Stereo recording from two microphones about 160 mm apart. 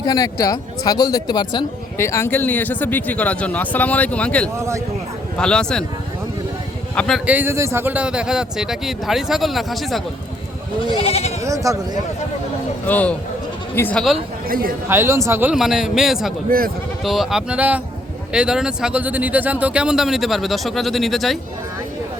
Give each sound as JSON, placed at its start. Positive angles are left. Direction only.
{"t": 0.0, "sound": "speech", "side_deg": 20}
{"t": 4.5, "sound": "speech", "side_deg": -20}
{"t": 5.4, "sound": "speech", "side_deg": 5}
{"t": 6.9, "sound": "a man's voice", "side_deg": 5}
{"t": 7.3, "sound": "speech", "side_deg": -10}
{"t": 10.8, "sound": "goat", "side_deg": 35}
{"t": 11.4, "sound": "speech", "side_deg": -20}
{"t": 12.8, "sound": "speech", "side_deg": 10}
{"t": 14.4, "sound": "speech", "side_deg": -65}
{"t": 14.8, "sound": "speech", "side_deg": -15}
{"t": 15.5, "sound": "speech", "side_deg": 0}
{"t": 16.5, "sound": "speech", "side_deg": -65}
{"t": 17.0, "sound": "speech", "side_deg": 0}